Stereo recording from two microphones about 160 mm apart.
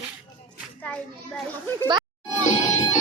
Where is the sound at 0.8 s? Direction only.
5° left (ahead or behind).